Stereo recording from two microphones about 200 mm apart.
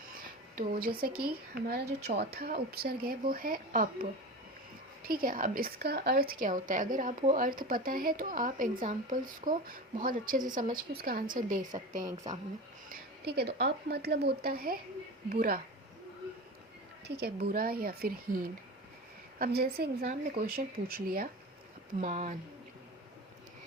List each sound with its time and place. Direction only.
0.5 s a woman's voice: 45° right (ahead or behind)
5.0 s a woman's voice: 45° right (ahead or behind)
12.9 s a woman's voice: 55° right (ahead or behind)
17.1 s a woman's voice: 55° right (ahead or behind)
22.0 s speech: 35° right (ahead or behind)